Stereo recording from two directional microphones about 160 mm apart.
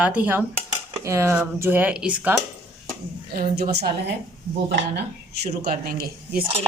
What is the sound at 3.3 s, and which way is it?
Speech, 75° right (ahead or behind).